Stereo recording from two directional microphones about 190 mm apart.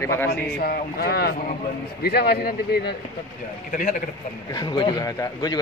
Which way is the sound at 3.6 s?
45° left (ahead or behind).